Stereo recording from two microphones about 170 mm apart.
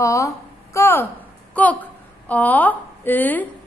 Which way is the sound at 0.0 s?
20° left (ahead or behind).